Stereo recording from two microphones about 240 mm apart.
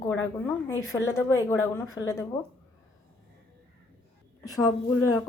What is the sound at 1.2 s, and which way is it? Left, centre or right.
Speech, centre.